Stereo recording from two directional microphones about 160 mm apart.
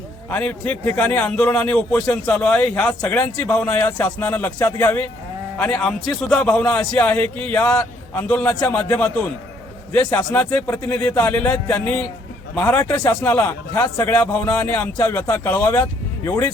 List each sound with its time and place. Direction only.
0.3 s a man's voice: 10° left (ahead or behind)
8.5 s a man's voice: 25° left (ahead or behind)
10.2 s a man's voice: 20° left (ahead or behind)